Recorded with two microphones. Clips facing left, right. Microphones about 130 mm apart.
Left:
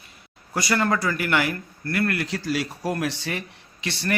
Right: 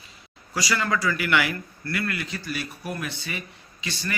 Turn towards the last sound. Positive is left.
turn(degrees=70)  # may be behind; listen again after turning